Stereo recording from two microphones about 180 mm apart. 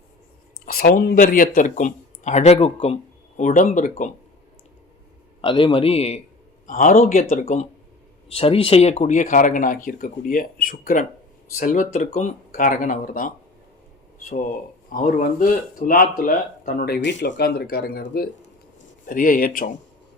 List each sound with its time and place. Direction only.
0.6 s speech: 55° left (ahead or behind)
5.4 s a man's voice: 30° left (ahead or behind)
6.7 s a man's voice: 45° left (ahead or behind)
14.8 s speech: 50° left (ahead or behind)